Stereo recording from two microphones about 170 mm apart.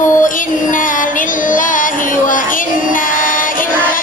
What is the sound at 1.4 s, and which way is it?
Music, 50° left (ahead or behind).